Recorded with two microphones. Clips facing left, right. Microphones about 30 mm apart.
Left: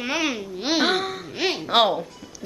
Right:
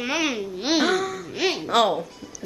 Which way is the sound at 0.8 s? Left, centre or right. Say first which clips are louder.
Even; left.